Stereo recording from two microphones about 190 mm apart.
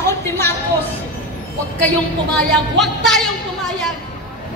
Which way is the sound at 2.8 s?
Centre (ahead or behind).